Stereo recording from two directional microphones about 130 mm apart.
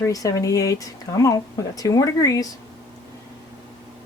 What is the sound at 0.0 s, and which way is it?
Speech, 25° left (ahead or behind).